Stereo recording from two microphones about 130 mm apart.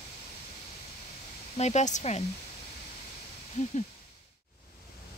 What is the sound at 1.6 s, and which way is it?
Speech, 60° left (ahead or behind).